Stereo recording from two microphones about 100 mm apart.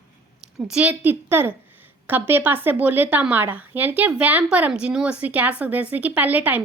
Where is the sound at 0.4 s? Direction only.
10° right (ahead or behind).